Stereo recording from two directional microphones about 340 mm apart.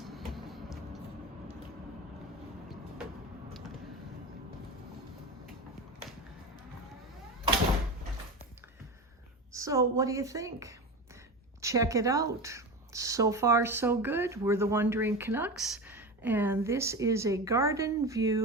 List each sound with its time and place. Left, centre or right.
0.0 s music: centre
9.5 s speech: centre